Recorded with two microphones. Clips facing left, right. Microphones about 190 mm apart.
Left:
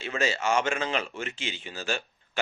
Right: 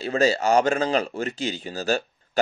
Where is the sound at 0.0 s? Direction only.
35° right (ahead or behind).